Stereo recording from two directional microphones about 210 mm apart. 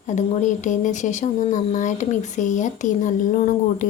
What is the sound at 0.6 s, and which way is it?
Speech, 35° left (ahead or behind).